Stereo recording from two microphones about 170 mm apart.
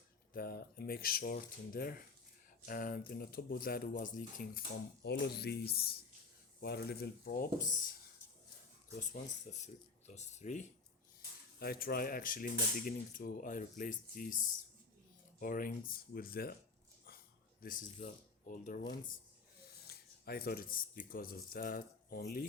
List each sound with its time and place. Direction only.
0.3 s speech: 60° left (ahead or behind)
5.0 s speech: 80° left; by 7.8 s 55° left (ahead or behind)
9.5 s speech: 45° left (ahead or behind)
11.6 s speech: 65° left (ahead or behind)
17.6 s speech: 55° left (ahead or behind)
19.9 s speech: 65° left (ahead or behind)